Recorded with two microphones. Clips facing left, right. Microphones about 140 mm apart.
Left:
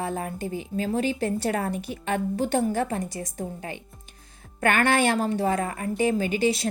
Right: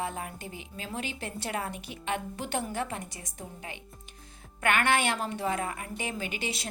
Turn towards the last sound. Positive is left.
turn(degrees=35)  # may be behind; listen again after turning